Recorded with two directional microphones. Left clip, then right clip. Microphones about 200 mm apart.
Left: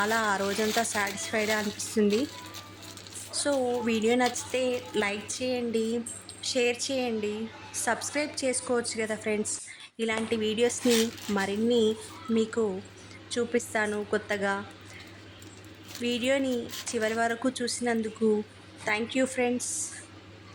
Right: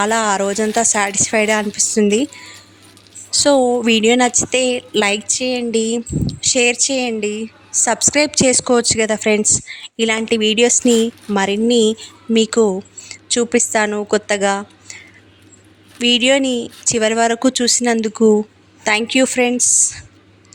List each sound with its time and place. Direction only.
0.0 s a woman's voice: 35° right (ahead or behind)
3.3 s a woman's voice: 40° right (ahead or behind)
16.0 s a woman's voice: 40° right (ahead or behind)